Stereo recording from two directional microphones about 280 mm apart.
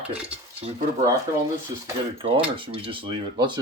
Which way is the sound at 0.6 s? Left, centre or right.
Right.